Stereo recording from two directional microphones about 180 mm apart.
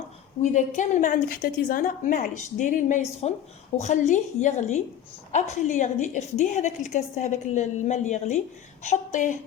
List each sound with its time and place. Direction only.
0.4 s a woman's voice: 45° left (ahead or behind)